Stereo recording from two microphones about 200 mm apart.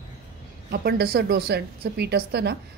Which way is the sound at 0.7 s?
50° right (ahead or behind).